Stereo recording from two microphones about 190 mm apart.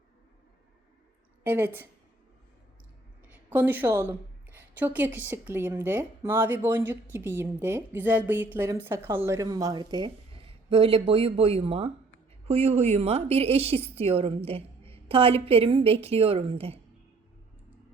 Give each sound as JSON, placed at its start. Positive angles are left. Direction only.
{"t": 1.5, "sound": "a woman's voice", "side_deg": -10}
{"t": 3.5, "sound": "a woman's voice", "side_deg": -10}